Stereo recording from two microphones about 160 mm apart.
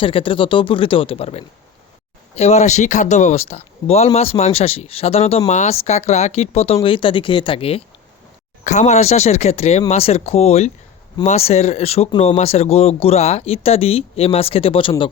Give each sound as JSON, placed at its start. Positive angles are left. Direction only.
{"t": 0.0, "sound": "speech", "side_deg": 35}
{"t": 8.6, "sound": "speech", "side_deg": 45}